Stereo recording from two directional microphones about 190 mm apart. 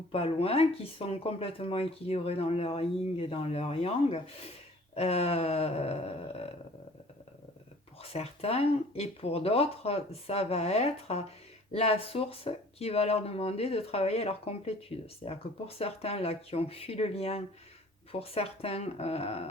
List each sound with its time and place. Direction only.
0.1 s speech: 30° left (ahead or behind)
8.0 s speech: 30° left (ahead or behind)